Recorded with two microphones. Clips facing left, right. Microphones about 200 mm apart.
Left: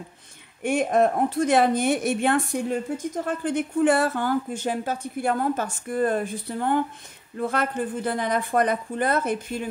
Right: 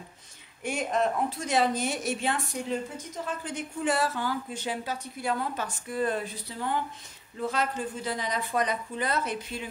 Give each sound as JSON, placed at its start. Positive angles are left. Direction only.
{"t": 0.6, "sound": "a woman's voice", "side_deg": 55}